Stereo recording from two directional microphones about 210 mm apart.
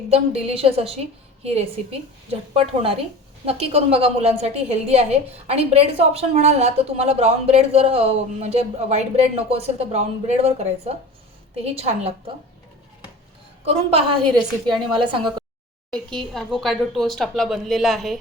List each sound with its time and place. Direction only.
0.1 s a woman's voice: 30° right (ahead or behind)
3.4 s a woman's voice: 30° right (ahead or behind)
13.7 s a woman's voice: 25° right (ahead or behind)
15.9 s speech: centre (ahead or behind)